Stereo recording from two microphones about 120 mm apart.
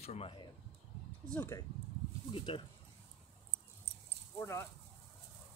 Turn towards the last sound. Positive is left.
turn(degrees=25)  # may be behind; listen again after turning